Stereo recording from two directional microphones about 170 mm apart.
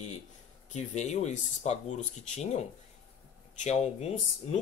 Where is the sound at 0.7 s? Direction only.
45° left (ahead or behind).